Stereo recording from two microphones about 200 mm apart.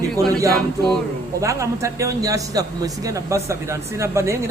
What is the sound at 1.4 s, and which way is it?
A man's voice, 15° right (ahead or behind).